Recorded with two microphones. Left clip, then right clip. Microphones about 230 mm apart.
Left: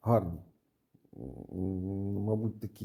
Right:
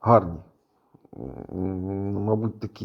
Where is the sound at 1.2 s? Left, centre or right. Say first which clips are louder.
Right 7 dB; centre.